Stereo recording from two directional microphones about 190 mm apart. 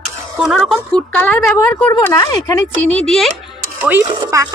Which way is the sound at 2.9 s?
Centre (ahead or behind).